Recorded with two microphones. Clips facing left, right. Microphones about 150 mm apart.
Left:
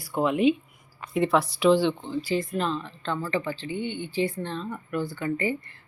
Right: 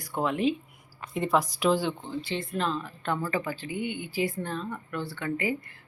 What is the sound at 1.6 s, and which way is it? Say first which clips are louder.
Speech: left 5 dB; centre (ahead or behind).